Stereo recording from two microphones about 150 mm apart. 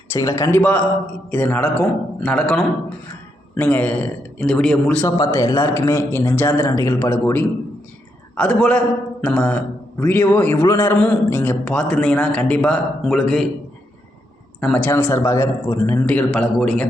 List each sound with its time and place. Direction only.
0.1 s a man's voice: 20° left (ahead or behind)
5.0 s a man's voice: 25° left (ahead or behind)
8.4 s a man's voice: 5° left (ahead or behind)
14.6 s a man's voice: 10° left (ahead or behind)